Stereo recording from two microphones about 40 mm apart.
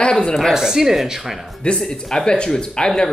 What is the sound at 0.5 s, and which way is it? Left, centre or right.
Speech, centre.